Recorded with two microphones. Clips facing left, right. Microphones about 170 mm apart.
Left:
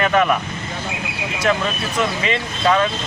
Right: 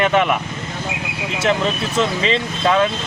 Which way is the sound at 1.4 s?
25° right (ahead or behind).